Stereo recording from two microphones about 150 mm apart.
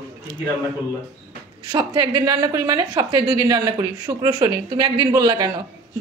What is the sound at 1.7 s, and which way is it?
A woman's voice, 30° right (ahead or behind).